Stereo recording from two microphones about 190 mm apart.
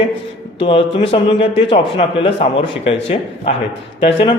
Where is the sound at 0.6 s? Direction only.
30° left (ahead or behind).